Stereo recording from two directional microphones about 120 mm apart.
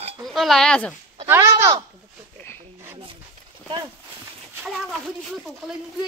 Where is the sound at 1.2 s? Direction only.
20° right (ahead or behind).